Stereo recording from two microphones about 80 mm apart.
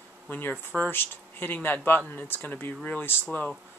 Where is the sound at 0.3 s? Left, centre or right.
Left.